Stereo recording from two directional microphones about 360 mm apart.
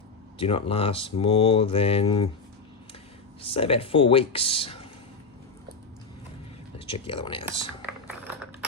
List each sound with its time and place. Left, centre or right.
0.3 s speech: centre
3.4 s speech: centre
6.7 s speech: centre